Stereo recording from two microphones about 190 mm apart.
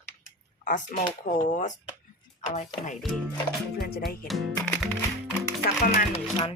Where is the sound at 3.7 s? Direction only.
55° left (ahead or behind).